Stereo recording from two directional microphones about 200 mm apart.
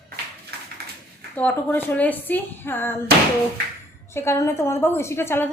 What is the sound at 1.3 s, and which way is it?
A woman's voice, 10° left (ahead or behind).